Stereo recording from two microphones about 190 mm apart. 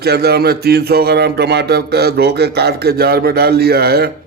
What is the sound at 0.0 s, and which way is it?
Speech, 55° right (ahead or behind).